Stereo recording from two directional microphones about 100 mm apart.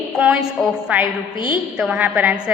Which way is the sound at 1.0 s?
45° left (ahead or behind).